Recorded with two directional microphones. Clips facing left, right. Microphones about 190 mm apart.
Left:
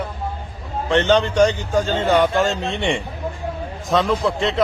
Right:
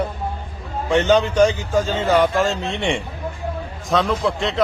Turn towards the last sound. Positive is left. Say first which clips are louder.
# left 1 dB
turn(degrees=0)  # may be behind; listen again after turning